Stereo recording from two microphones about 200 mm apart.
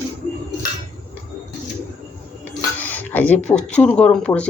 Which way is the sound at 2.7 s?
10° left (ahead or behind).